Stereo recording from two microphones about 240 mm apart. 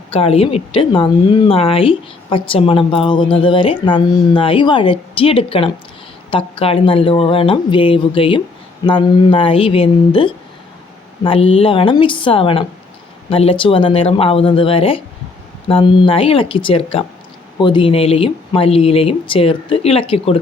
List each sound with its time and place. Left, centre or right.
0.1 s a woman's voice: left